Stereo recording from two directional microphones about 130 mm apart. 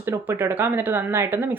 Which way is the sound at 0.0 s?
15° right (ahead or behind).